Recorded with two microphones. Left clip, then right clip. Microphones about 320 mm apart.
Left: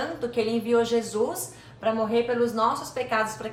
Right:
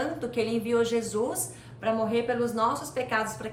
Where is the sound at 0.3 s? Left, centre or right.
Centre.